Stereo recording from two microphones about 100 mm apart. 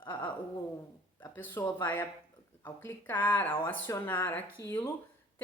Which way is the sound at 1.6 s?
25° left (ahead or behind).